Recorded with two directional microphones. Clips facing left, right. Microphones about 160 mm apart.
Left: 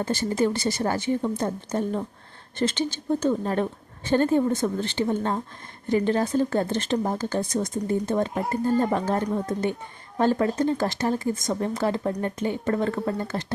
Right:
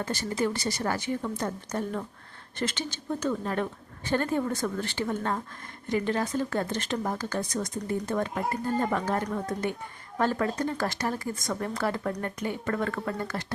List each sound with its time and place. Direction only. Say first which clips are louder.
0.0 s speech: left 5 dB; 25° left (ahead or behind)